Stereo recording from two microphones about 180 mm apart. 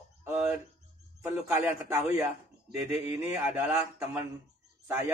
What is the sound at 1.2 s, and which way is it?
A man's voice, 15° right (ahead or behind).